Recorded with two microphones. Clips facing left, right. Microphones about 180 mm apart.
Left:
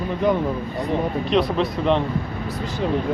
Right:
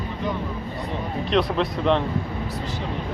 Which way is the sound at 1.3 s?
Centre (ahead or behind).